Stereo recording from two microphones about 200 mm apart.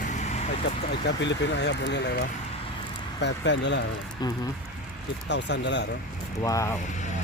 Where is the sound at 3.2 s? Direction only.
60° left (ahead or behind).